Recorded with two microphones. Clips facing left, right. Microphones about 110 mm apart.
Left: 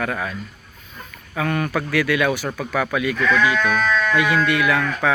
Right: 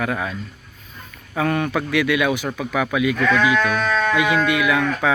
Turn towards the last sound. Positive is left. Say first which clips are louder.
# right 1 dB
turn(degrees=-15)  # may be behind; listen again after turning